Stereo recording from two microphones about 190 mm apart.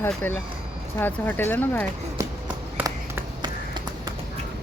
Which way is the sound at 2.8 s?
20° right (ahead or behind).